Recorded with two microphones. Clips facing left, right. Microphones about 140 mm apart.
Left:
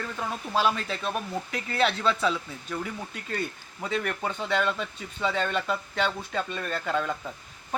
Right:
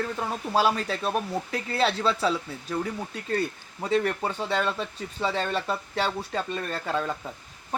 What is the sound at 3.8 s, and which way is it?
Speech, 35° right (ahead or behind).